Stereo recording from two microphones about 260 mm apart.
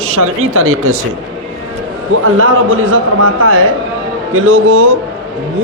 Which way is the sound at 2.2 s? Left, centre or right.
Right.